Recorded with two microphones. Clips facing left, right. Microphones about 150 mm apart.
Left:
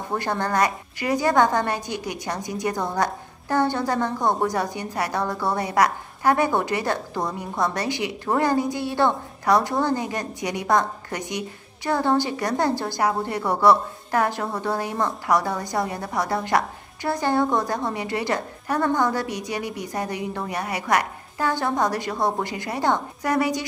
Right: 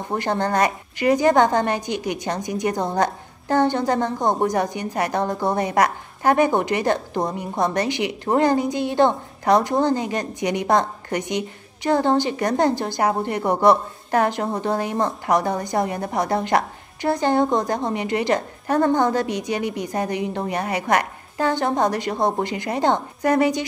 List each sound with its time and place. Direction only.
0.1 s a woman's voice: 25° right (ahead or behind)